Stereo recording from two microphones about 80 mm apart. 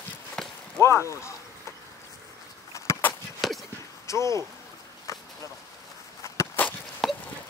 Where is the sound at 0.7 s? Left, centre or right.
Left.